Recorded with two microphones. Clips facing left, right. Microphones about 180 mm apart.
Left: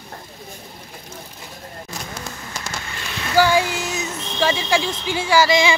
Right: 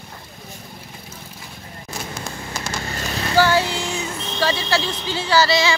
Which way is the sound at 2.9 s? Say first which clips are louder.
Right 5 dB; 40° right (ahead or behind).